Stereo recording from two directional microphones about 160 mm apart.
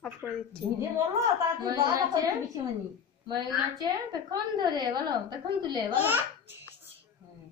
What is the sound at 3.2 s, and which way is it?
A woman's voice, 25° right (ahead or behind).